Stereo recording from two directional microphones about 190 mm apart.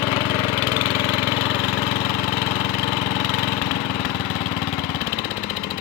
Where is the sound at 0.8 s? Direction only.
20° left (ahead or behind).